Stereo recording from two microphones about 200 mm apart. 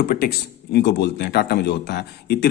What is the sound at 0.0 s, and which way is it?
A man's voice, 55° left (ahead or behind).